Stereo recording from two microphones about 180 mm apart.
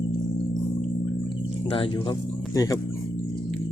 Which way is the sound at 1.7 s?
30° left (ahead or behind).